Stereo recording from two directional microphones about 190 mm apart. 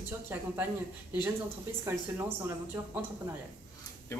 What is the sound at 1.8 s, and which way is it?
A woman's voice, 15° right (ahead or behind).